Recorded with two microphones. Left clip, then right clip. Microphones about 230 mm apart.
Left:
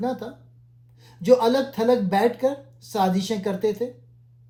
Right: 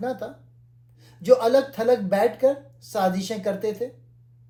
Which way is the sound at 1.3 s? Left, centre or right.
Left.